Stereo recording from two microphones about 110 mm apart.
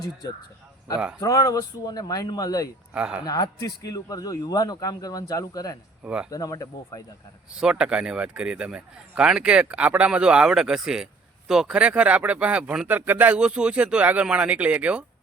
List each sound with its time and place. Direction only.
1.2 s a man's voice: 35° left (ahead or behind)
2.9 s speech: 10° right (ahead or behind)
3.2 s a man's voice: 35° left (ahead or behind)
7.5 s speech: 10° right (ahead or behind)